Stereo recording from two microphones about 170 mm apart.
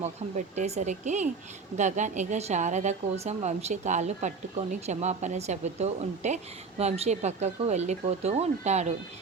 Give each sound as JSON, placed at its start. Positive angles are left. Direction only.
{"t": 0.0, "sound": "a woman's voice", "side_deg": -45}